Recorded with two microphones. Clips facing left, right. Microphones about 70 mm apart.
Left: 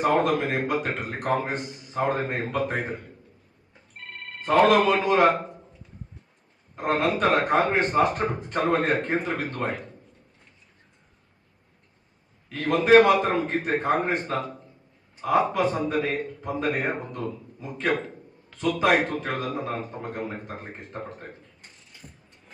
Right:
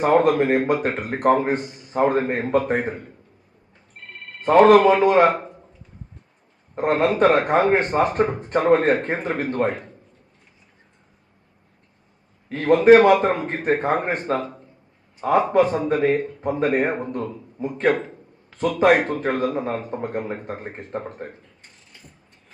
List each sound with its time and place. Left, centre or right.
0.0 s speech: right
4.4 s speech: right
6.7 s speech: right
12.5 s a man's voice: right